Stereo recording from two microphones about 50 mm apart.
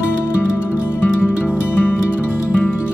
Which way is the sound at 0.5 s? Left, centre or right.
Left.